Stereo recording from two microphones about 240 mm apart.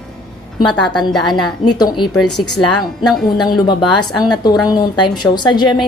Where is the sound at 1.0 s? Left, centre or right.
Centre.